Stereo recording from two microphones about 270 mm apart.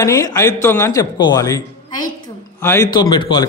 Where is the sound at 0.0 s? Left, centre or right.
Centre.